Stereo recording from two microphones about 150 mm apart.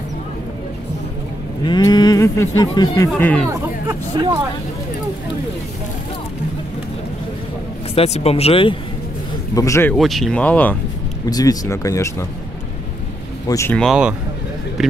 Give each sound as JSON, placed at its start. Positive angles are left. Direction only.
{"t": 1.6, "sound": "speech", "side_deg": 30}
{"t": 3.2, "sound": "speech", "side_deg": 10}
{"t": 3.8, "sound": "hubbub", "side_deg": -25}
{"t": 7.9, "sound": "speech", "side_deg": 45}
{"t": 9.6, "sound": "speech", "side_deg": 20}
{"t": 9.9, "sound": "speech", "side_deg": 0}
{"t": 11.2, "sound": "speech", "side_deg": 25}
{"t": 13.5, "sound": "speech", "side_deg": 20}
{"t": 13.7, "sound": "speech", "side_deg": -5}